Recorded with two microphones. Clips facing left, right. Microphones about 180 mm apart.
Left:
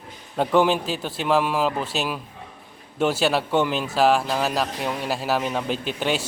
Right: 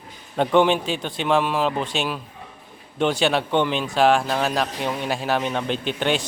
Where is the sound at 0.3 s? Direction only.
5° left (ahead or behind).